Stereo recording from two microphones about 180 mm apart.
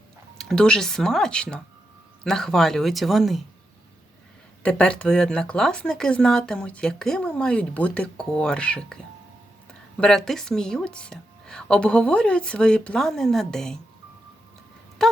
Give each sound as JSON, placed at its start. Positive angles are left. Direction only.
{"t": 0.3, "sound": "speech", "side_deg": 5}
{"t": 4.6, "sound": "speech", "side_deg": 5}
{"t": 15.0, "sound": "speech", "side_deg": 0}